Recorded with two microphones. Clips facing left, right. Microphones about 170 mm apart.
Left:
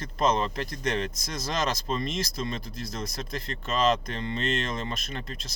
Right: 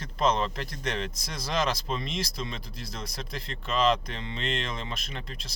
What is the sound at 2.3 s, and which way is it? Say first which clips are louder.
Speech: left 4 dB; centre (ahead or behind).